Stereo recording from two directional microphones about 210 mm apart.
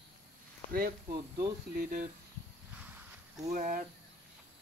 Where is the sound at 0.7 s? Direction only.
40° right (ahead or behind).